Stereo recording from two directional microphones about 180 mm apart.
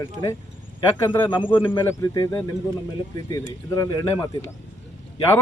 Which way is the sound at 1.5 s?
25° left (ahead or behind).